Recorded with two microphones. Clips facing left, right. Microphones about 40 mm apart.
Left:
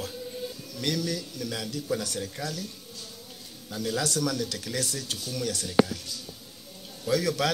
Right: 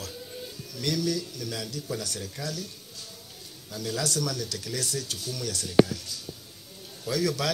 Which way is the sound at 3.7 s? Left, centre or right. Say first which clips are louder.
Left 1 dB; left.